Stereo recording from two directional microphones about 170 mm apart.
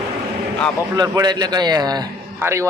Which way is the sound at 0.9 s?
25° right (ahead or behind).